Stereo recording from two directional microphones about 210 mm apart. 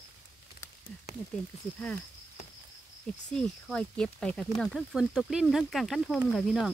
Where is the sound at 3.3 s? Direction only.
5° left (ahead or behind).